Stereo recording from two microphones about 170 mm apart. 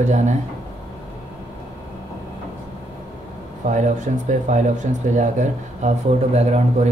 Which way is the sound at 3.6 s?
45° right (ahead or behind).